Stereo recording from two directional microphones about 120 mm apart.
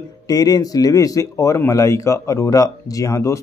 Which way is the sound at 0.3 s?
30° left (ahead or behind).